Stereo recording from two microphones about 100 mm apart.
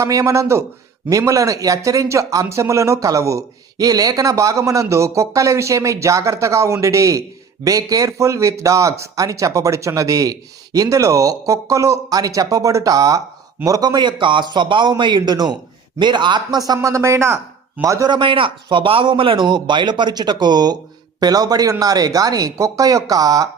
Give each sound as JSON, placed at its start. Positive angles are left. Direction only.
{"t": 0.0, "sound": "a man's voice", "side_deg": -35}
{"t": 18.1, "sound": "a man's voice", "side_deg": -55}